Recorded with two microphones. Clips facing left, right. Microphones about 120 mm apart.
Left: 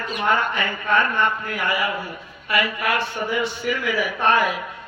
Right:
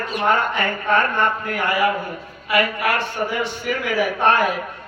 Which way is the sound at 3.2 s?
45° right (ahead or behind).